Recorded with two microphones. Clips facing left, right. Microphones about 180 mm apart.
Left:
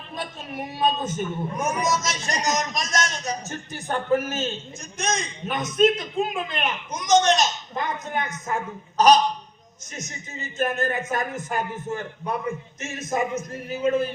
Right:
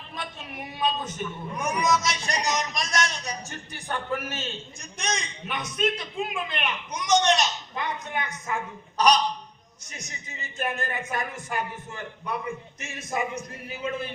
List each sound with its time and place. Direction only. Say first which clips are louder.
0.2 s a man's voice: left 5 dB; 45° left (ahead or behind)